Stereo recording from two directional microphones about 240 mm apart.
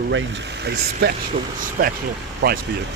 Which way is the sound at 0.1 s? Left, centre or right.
Right.